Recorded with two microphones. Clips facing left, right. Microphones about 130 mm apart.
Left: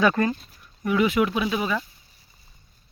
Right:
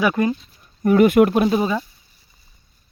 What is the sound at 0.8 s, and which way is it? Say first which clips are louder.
Speech: right 8 dB; 45° right (ahead or behind).